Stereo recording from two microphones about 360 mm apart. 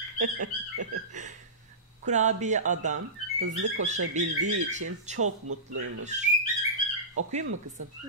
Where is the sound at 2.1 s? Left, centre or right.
Centre.